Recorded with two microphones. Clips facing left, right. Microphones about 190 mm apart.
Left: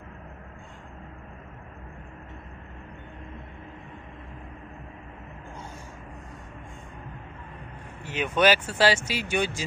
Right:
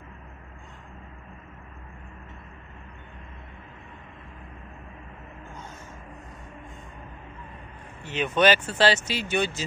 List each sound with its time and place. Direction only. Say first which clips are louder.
8.0 s speech: right 1 dB; 10° left (ahead or behind)